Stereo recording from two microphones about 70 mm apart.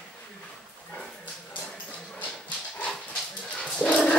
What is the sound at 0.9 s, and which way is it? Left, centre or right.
Dog, left.